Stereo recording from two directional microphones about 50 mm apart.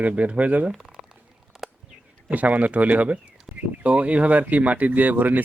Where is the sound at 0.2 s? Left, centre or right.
Right.